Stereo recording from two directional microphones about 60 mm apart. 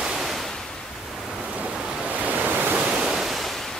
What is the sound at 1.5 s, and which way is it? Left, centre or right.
Waves, centre.